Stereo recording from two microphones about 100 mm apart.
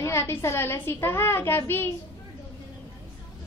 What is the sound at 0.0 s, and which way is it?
A woman's voice, 25° left (ahead or behind).